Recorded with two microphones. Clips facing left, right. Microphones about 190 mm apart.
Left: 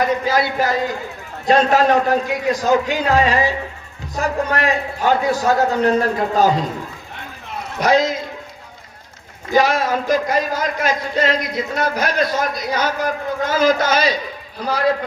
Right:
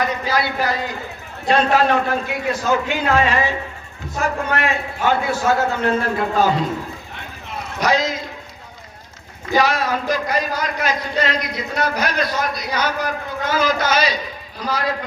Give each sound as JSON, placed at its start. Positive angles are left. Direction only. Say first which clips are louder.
{"t": 0.0, "sound": "a man's voice", "louder": "left 3 dB", "side_deg": 45}
{"t": 7.8, "sound": "speech", "louder": "left 3 dB", "side_deg": 50}
{"t": 9.5, "sound": "speech", "louder": "left 2 dB", "side_deg": 45}